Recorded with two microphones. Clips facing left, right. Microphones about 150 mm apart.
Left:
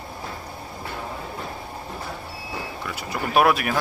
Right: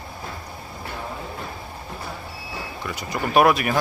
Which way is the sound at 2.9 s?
5° left (ahead or behind).